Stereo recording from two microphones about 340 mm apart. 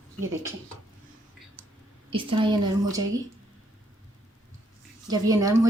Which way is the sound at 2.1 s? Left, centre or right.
Centre.